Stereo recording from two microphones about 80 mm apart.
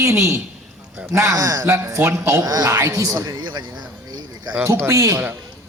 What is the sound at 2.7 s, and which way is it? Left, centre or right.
Speech, right.